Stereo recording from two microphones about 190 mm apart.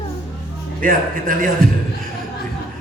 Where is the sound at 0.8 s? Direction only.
45° right (ahead or behind).